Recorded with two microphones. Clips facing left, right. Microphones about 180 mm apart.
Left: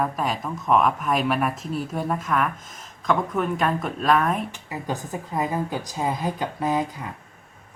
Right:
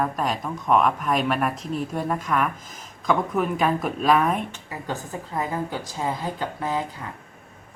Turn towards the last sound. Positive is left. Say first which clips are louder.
# left 3 dB
turn(degrees=15)  # may be behind; listen again after turning